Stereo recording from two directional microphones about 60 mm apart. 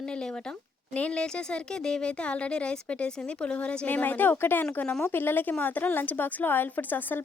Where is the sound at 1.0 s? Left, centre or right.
Centre.